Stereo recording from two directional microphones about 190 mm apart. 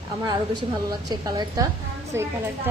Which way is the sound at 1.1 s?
20° right (ahead or behind).